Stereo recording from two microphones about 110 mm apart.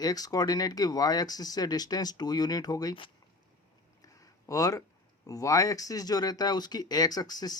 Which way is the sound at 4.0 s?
30° left (ahead or behind).